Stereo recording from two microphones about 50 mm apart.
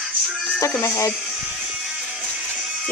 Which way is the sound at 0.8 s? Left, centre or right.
Left.